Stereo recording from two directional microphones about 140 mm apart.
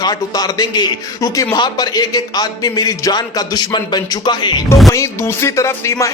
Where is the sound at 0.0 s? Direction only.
30° left (ahead or behind).